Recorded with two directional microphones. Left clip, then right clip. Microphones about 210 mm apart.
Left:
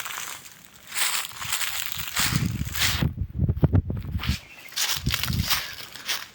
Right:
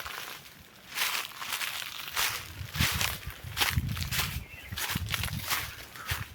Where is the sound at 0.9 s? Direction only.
50° left (ahead or behind).